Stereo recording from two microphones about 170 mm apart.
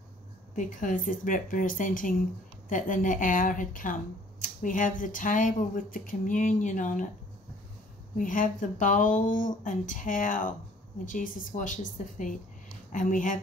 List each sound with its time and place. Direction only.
0.6 s speech: 50° left (ahead or behind)
8.2 s speech: 50° left (ahead or behind)